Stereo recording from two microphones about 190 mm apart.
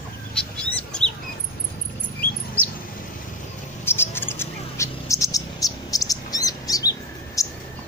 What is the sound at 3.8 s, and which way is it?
Bird, 10° left (ahead or behind).